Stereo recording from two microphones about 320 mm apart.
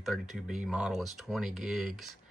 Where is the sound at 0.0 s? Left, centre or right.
Centre.